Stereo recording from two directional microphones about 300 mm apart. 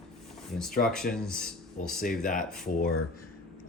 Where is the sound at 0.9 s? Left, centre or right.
Centre.